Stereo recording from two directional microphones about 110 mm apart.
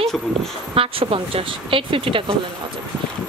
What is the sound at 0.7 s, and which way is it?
A woman's voice, 55° right (ahead or behind).